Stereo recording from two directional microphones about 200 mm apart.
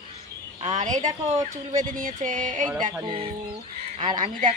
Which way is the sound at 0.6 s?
35° right (ahead or behind).